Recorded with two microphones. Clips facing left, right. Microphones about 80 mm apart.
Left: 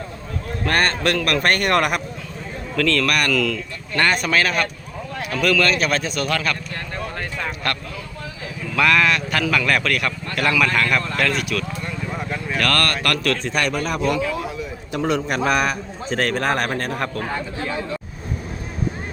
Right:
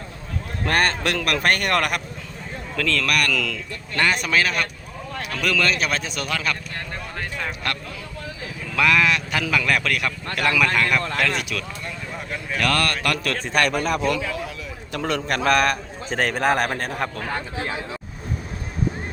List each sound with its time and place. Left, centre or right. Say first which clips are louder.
0.6 s a man's voice: left 1 dB; centre
2.7 s a man's voice: left 3 dB; centre
7.2 s a sound: left 2 dB; centre
8.7 s a man's voice: left 2 dB; centre
14.9 s a man's voice: left 3 dB; centre
16.0 s speech: even; centre